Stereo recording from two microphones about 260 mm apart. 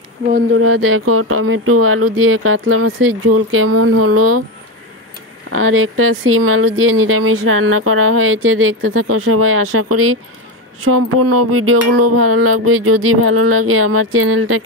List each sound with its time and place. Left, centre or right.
0.5 s speech: right
5.5 s speech: right